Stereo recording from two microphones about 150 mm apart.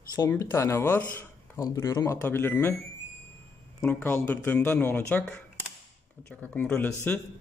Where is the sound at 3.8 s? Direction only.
10° left (ahead or behind).